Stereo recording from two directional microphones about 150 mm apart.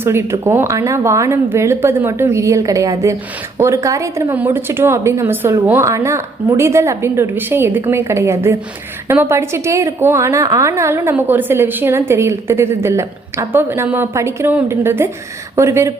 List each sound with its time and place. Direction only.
0.0 s a woman's voice: 15° right (ahead or behind)